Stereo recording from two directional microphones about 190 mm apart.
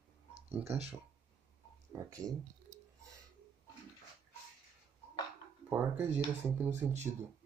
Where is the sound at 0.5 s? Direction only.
5° right (ahead or behind).